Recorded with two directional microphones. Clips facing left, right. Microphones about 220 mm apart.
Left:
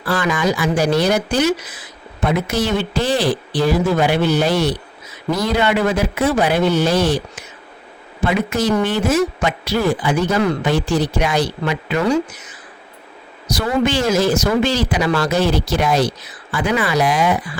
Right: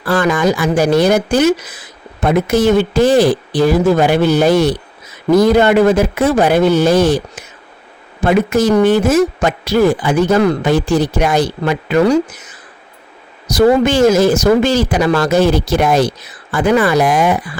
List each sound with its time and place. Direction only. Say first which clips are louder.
0.0 s speech: right 5 dB; 50° right (ahead or behind)
13.5 s speech: right 7 dB; 45° right (ahead or behind)